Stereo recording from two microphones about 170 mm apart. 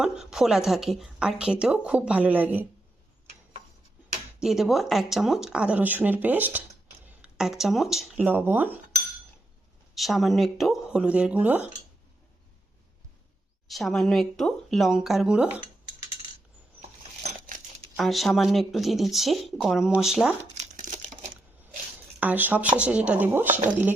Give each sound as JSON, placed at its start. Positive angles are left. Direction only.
{"t": 0.0, "sound": "speech", "side_deg": -5}
{"t": 4.4, "sound": "speech", "side_deg": 0}
{"t": 9.9, "sound": "speech", "side_deg": 0}
{"t": 13.7, "sound": "speech", "side_deg": 0}
{"t": 17.2, "sound": "coin", "side_deg": -50}
{"t": 17.9, "sound": "speech", "side_deg": 0}
{"t": 20.6, "sound": "crumpling", "side_deg": -45}
{"t": 22.2, "sound": "speech", "side_deg": -10}